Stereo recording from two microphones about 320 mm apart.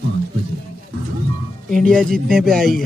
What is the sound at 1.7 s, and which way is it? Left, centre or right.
Speech, centre.